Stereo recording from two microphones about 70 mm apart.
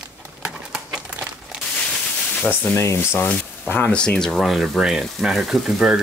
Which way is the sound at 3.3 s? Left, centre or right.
Left.